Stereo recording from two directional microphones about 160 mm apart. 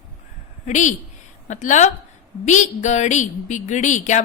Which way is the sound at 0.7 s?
50° left (ahead or behind).